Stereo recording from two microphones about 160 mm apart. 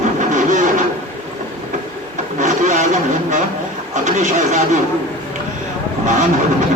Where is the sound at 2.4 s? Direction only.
55° right (ahead or behind).